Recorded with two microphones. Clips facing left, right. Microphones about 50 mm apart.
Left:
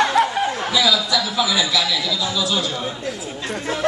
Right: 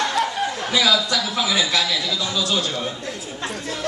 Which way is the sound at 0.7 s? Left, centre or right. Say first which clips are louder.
Even; right.